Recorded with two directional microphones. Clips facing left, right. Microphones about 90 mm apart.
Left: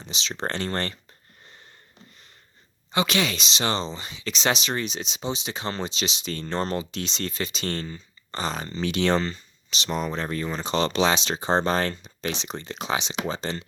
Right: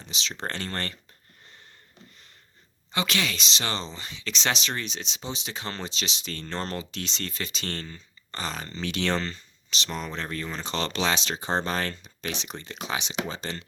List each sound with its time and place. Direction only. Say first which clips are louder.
0.0 s speech: left 3 dB; 25° left (ahead or behind)
2.9 s speech: left 4 dB; 20° left (ahead or behind)